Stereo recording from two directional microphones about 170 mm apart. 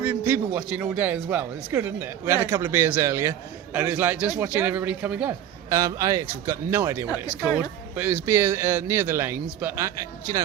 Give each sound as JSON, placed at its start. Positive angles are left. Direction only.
{"t": 0.0, "sound": "speech", "side_deg": -10}
{"t": 5.7, "sound": "speech", "side_deg": -20}